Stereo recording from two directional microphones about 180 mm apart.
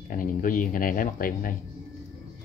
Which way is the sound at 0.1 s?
50° left (ahead or behind).